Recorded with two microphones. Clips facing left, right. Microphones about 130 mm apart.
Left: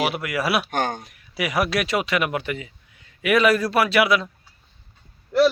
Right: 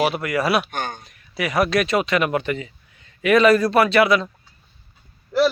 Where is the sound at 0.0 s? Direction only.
5° left (ahead or behind).